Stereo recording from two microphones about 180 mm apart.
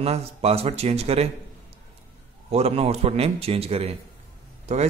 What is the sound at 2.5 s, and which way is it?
A man's voice, 35° right (ahead or behind).